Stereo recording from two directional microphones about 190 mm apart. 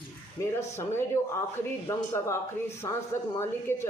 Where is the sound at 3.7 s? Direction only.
10° left (ahead or behind).